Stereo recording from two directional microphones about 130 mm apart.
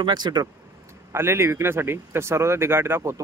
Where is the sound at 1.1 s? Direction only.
20° right (ahead or behind).